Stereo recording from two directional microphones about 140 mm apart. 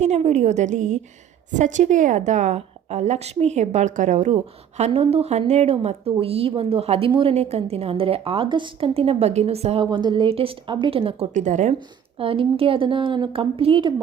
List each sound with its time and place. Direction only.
0.0 s a woman's voice: 55° right (ahead or behind)
4.8 s a woman's voice: 45° right (ahead or behind)
9.8 s speech: 35° right (ahead or behind)
11.3 s a woman's voice: 60° right (ahead or behind)
11.7 s speech: 40° right (ahead or behind)